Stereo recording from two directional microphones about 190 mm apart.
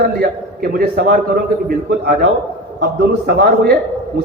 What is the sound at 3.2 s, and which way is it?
Speech, 55° right (ahead or behind).